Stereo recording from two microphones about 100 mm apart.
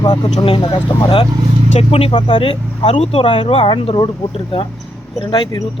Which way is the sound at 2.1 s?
55° left (ahead or behind).